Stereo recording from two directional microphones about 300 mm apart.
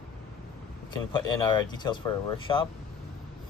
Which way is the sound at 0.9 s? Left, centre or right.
Centre.